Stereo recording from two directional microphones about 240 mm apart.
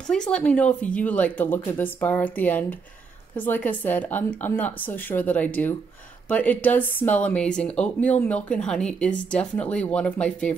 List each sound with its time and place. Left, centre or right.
0.1 s speech: centre